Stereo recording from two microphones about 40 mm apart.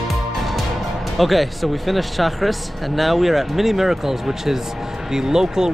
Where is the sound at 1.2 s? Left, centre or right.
Centre.